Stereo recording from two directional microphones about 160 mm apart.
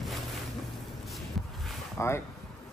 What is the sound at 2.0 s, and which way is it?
Speech, 15° left (ahead or behind).